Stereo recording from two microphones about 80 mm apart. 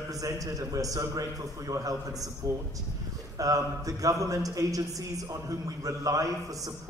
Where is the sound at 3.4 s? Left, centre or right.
Right.